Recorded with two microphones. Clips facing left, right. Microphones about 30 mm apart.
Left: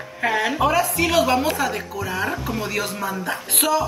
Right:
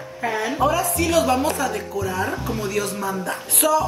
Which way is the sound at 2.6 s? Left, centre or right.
Left.